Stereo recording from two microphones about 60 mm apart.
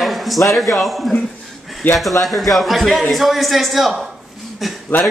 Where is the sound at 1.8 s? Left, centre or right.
Left.